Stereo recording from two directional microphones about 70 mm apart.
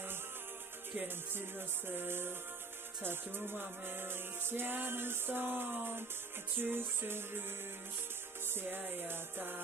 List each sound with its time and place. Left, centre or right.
0.9 s music: right
8.5 s music: right